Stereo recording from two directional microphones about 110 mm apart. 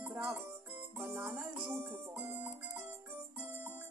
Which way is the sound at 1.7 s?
20° right (ahead or behind).